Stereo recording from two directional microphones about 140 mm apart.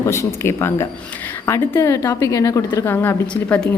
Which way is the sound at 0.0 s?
20° left (ahead or behind).